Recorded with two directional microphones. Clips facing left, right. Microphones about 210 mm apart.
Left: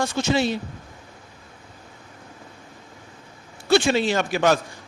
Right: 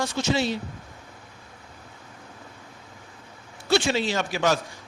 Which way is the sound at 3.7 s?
55° left (ahead or behind).